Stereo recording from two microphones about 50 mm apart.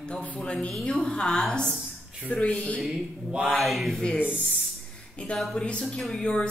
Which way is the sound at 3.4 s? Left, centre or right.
Centre.